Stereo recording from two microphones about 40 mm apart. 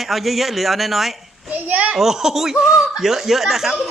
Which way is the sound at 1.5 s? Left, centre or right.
Right.